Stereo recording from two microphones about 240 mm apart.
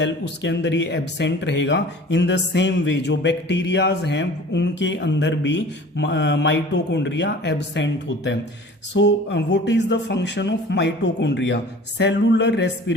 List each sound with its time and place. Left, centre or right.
0.0 s speech: left